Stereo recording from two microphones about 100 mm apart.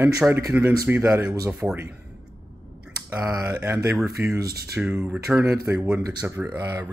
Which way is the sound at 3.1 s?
30° right (ahead or behind).